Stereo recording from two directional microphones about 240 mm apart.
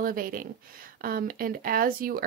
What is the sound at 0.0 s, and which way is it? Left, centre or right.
Speech, right.